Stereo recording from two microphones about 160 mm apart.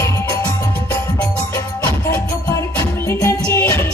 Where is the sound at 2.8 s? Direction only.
15° left (ahead or behind).